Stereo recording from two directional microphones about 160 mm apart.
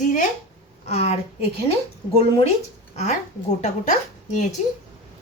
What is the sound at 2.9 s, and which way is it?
A woman's voice, 45° left (ahead or behind).